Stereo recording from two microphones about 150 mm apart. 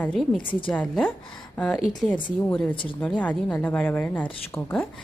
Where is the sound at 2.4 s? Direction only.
10° left (ahead or behind).